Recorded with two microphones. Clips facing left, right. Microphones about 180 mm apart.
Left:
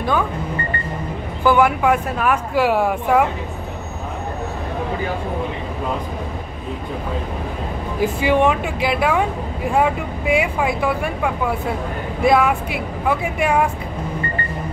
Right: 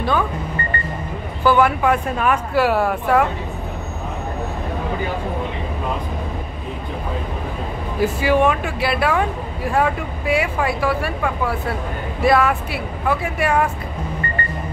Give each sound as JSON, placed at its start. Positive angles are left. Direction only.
{"t": 1.4, "sound": "speech", "side_deg": 15}
{"t": 8.0, "sound": "speech", "side_deg": 20}